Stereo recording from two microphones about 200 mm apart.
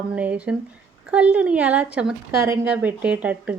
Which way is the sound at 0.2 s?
5° right (ahead or behind).